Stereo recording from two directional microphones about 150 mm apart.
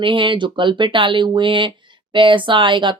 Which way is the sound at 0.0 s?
35° right (ahead or behind).